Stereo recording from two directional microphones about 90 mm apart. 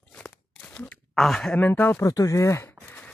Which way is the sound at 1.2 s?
5° left (ahead or behind).